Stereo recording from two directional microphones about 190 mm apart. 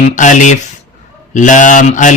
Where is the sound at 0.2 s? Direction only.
40° left (ahead or behind).